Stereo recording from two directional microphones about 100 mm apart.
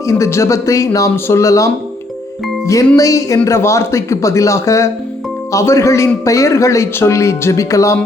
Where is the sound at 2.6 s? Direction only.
35° left (ahead or behind).